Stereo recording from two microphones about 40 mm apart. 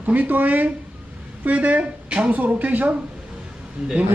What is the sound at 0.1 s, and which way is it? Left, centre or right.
Speech, right.